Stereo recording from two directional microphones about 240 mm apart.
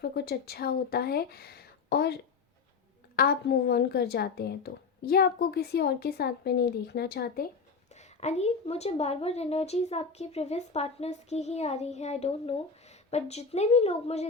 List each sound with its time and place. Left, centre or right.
0.0 s a woman's voice: left
3.2 s a woman's voice: left
7.9 s a woman's voice: left